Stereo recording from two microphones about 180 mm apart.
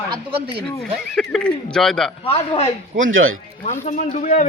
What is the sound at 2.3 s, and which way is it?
Speech, 35° left (ahead or behind).